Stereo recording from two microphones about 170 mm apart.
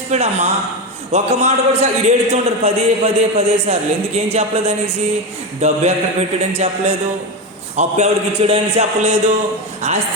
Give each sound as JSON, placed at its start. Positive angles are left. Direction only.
{"t": 0.1, "sound": "a man's voice", "side_deg": -40}